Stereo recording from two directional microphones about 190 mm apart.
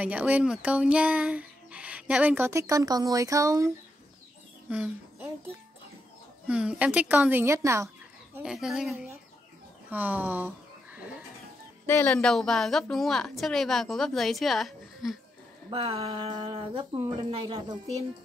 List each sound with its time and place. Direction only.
0.0 s music: 10° right (ahead or behind)
4.6 s a sound: 10° right (ahead or behind)
6.4 s music: 5° right (ahead or behind)
8.4 s a woman's voice: centre (ahead or behind)
11.8 s a woman's voice: 10° left (ahead or behind)
15.7 s speech: 30° right (ahead or behind)